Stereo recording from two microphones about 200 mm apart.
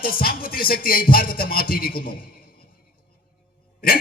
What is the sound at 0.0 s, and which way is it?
Music, 50° left (ahead or behind).